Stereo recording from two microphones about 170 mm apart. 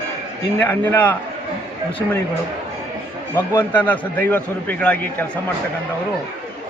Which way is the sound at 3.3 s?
10° left (ahead or behind).